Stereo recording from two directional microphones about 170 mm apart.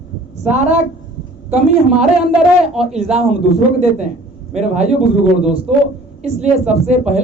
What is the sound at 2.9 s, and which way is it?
A woman's voice, 40° right (ahead or behind).